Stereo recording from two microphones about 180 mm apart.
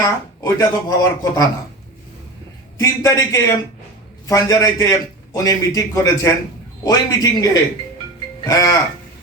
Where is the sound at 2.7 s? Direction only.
20° left (ahead or behind).